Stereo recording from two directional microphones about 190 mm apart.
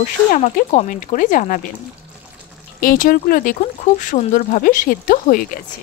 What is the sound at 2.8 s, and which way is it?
Speech, 50° left (ahead or behind).